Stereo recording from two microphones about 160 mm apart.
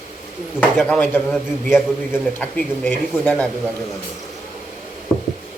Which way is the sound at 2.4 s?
10° left (ahead or behind).